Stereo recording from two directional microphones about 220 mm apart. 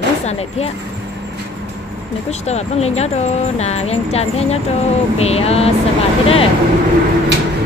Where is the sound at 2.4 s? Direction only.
30° left (ahead or behind).